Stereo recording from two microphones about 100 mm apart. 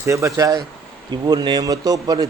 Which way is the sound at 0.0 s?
30° right (ahead or behind).